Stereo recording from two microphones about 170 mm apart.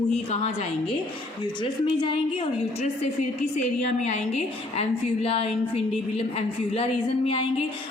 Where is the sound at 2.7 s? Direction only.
40° left (ahead or behind).